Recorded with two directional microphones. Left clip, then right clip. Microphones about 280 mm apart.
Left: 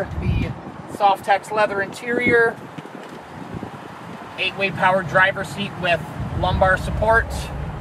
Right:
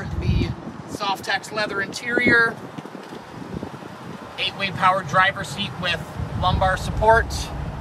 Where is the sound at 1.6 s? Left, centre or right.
Centre.